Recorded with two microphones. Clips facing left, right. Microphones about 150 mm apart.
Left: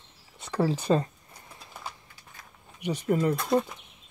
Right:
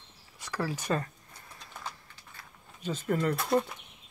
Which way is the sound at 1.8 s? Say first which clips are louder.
Left 1 dB; 15° left (ahead or behind).